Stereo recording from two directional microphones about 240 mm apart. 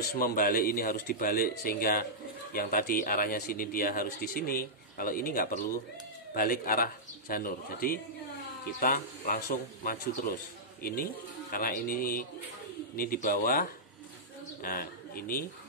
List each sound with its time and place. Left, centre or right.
0.1 s speech: left